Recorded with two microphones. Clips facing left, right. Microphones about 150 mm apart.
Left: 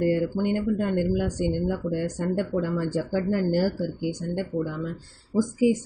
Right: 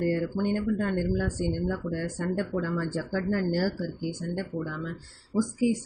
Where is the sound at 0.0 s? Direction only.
15° left (ahead or behind).